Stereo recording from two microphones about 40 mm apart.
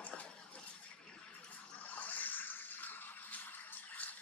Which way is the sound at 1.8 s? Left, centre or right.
Left.